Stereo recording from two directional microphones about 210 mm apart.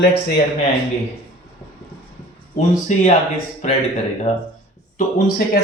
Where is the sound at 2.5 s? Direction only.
35° left (ahead or behind).